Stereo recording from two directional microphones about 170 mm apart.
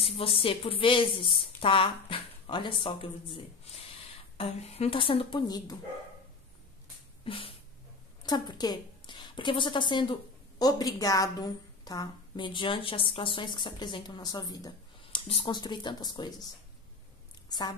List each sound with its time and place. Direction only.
0.0 s speech: 35° left (ahead or behind)
7.2 s a sound: 30° left (ahead or behind)
8.3 s a woman's voice: 25° left (ahead or behind)
15.1 s a woman's voice: 30° left (ahead or behind)
17.5 s speech: 25° left (ahead or behind)